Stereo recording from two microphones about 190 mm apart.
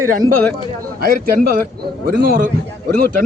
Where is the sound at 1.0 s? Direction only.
50° right (ahead or behind).